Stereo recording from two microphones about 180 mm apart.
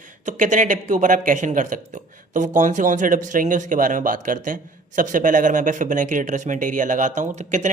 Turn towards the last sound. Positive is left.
turn(degrees=-45)  # may be behind; listen again after turning